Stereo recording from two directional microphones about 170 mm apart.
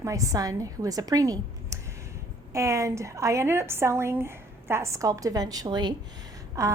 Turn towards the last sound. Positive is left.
turn(degrees=-20)  # may be behind; listen again after turning